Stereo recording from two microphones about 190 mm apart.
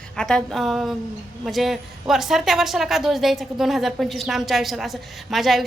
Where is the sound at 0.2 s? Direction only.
5° left (ahead or behind).